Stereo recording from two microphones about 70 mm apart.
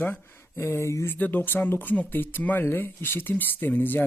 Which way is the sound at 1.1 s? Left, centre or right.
Left.